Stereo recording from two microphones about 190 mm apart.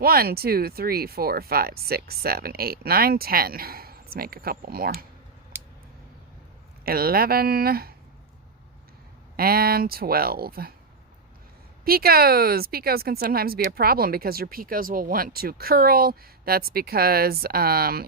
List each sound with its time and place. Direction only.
0.0 s speech: 55° right (ahead or behind)
5.5 s a sound: 10° right (ahead or behind)
6.8 s speech: 50° right (ahead or behind)
9.3 s speech: 50° right (ahead or behind)
11.9 s speech: 55° right (ahead or behind)